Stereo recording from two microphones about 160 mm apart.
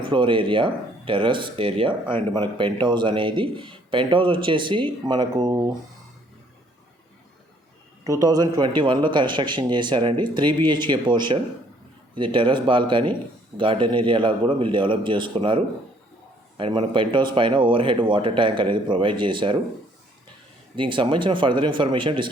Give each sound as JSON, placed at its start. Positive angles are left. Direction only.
{"t": 0.0, "sound": "speech", "side_deg": -30}
{"t": 8.0, "sound": "a man's voice", "side_deg": -20}
{"t": 20.7, "sound": "speech", "side_deg": -30}